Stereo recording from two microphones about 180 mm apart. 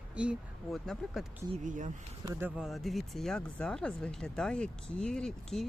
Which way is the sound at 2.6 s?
Centre (ahead or behind).